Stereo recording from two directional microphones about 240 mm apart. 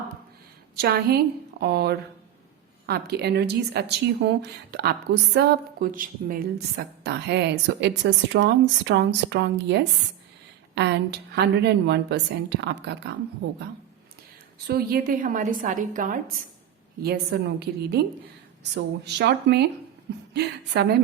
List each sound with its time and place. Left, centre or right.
0.8 s a woman's voice: right
14.7 s a woman's voice: right